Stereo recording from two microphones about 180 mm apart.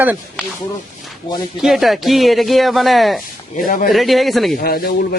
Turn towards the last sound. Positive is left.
turn(degrees=55)  # may be behind; listen again after turning